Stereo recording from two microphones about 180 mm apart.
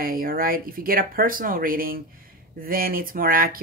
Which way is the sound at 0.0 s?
50° right (ahead or behind).